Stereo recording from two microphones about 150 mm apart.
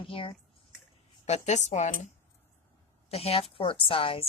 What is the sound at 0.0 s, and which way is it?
Speech, 35° left (ahead or behind).